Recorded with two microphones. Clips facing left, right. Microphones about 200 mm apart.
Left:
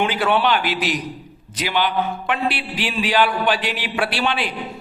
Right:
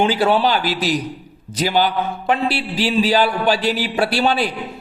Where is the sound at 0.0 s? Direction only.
35° right (ahead or behind).